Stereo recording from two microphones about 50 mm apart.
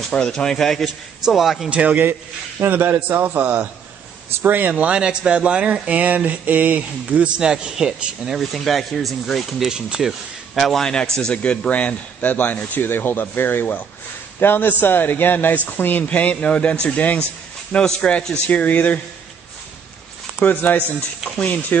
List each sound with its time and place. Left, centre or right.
0.1 s speech: centre
1.2 s speech: centre
1.7 s speech: right
2.6 s a man's voice: right
7.3 s speech: centre
8.4 s speech: centre
9.7 s speech: centre
10.5 s a man's voice: centre; by 18.9 s left
20.3 s speech: left